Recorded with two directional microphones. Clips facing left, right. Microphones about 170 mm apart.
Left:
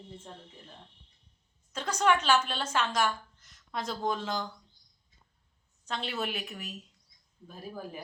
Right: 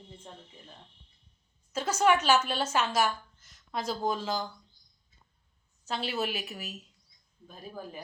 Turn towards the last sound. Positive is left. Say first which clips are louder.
# left 1 dB
turn(degrees=5)  # may be behind; listen again after turning